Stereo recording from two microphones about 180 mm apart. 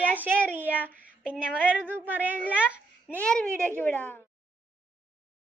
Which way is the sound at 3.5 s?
15° right (ahead or behind).